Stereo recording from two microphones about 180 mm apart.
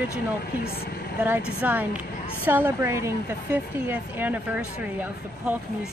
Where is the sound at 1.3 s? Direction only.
10° right (ahead or behind).